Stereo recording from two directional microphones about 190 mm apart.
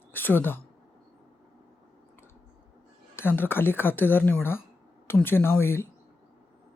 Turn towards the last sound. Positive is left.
turn(degrees=10)  # may be behind; listen again after turning